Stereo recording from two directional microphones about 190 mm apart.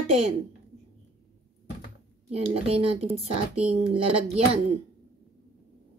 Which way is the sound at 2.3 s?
30° right (ahead or behind).